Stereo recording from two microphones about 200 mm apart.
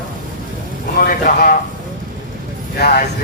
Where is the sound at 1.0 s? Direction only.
45° left (ahead or behind).